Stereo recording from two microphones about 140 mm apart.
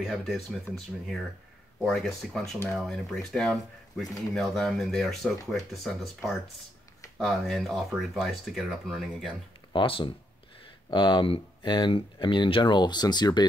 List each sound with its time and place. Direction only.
0.0 s speech: centre (ahead or behind)
9.7 s speech: 35° left (ahead or behind)